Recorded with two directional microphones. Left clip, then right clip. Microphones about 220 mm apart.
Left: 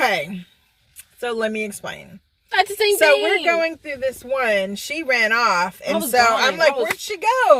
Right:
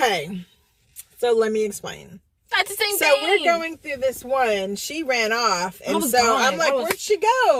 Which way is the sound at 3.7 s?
10° left (ahead or behind).